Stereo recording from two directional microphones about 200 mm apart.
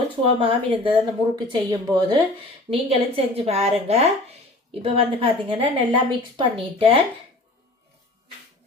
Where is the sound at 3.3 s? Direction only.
30° right (ahead or behind).